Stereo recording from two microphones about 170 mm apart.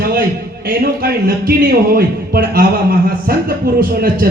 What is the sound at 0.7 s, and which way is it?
Speech, 60° right (ahead or behind).